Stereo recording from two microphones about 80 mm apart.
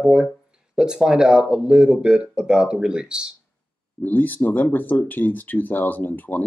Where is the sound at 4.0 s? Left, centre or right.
Left.